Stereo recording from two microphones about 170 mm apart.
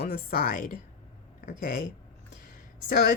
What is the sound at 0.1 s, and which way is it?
A woman's voice, 55° left (ahead or behind).